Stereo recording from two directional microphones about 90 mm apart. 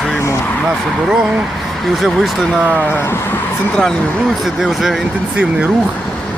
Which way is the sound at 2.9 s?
30° left (ahead or behind).